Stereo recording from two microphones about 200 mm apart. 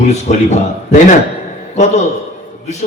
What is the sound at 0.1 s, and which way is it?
A man's voice, 35° left (ahead or behind).